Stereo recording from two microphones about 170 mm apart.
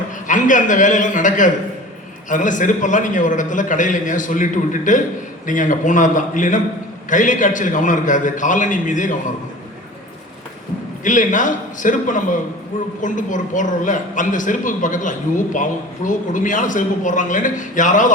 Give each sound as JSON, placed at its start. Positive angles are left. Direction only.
{"t": 0.3, "sound": "a man's voice", "side_deg": 50}
{"t": 11.0, "sound": "a man's voice", "side_deg": 50}